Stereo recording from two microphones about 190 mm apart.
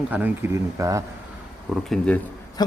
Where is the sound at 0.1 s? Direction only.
10° right (ahead or behind).